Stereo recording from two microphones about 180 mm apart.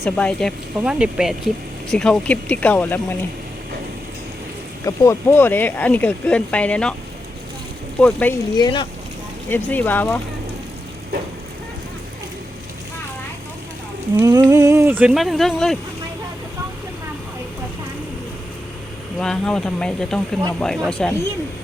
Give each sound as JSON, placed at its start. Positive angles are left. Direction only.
{"t": 0.0, "sound": "speech", "side_deg": 5}
{"t": 4.9, "sound": "speech", "side_deg": 15}
{"t": 7.9, "sound": "speech", "side_deg": 5}
{"t": 8.5, "sound": "speech", "side_deg": 25}
{"t": 9.5, "sound": "speech", "side_deg": 10}
{"t": 14.2, "sound": "speech", "side_deg": -20}
{"t": 19.2, "sound": "speech", "side_deg": 5}